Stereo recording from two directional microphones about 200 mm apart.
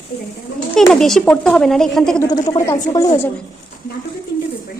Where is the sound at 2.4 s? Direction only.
20° left (ahead or behind).